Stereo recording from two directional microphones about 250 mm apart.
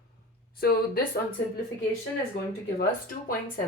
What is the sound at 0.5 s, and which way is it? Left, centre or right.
Speech, left.